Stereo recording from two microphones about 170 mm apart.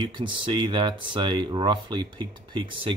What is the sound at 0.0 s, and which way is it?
Speech, 25° right (ahead or behind).